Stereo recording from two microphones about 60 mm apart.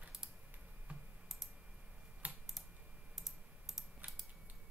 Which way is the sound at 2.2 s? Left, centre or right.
Right.